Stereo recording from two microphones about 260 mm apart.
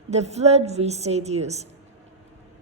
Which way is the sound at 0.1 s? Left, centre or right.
Right.